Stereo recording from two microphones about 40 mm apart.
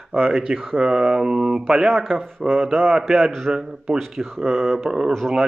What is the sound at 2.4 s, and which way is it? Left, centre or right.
Speech, right.